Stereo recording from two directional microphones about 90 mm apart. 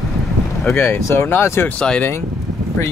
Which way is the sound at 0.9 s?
30° left (ahead or behind).